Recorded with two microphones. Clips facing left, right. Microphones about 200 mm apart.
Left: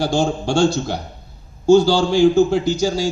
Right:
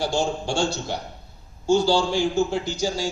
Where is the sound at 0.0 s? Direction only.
90° left.